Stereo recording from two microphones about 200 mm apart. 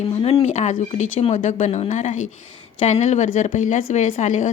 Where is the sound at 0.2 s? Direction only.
30° left (ahead or behind).